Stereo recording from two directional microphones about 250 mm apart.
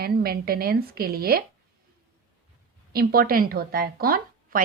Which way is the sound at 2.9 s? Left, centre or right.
Right.